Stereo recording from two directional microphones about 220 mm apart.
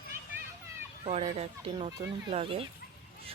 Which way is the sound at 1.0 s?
30° right (ahead or behind).